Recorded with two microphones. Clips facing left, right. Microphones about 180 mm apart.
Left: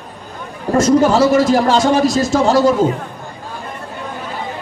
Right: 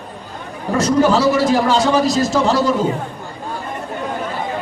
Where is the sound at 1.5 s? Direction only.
50° left (ahead or behind).